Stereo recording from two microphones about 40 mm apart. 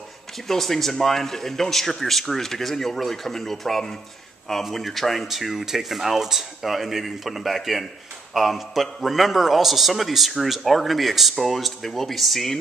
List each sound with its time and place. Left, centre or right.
0.5 s a man's voice: centre